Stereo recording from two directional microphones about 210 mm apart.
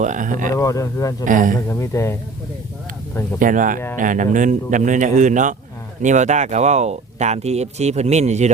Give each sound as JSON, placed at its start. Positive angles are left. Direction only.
{"t": 0.0, "sound": "speech", "side_deg": -35}
{"t": 0.5, "sound": "speech", "side_deg": 15}
{"t": 1.2, "sound": "speech", "side_deg": -40}
{"t": 1.7, "sound": "speech", "side_deg": 15}
{"t": 3.4, "sound": "speech", "side_deg": -40}